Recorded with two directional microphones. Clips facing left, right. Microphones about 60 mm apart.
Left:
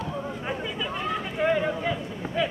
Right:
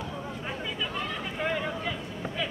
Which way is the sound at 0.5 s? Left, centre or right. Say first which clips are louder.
Left 2 dB; centre.